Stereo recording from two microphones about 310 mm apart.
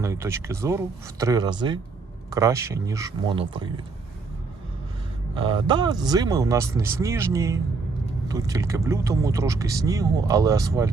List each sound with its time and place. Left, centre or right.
0.0 s speech: centre
5.4 s speech: centre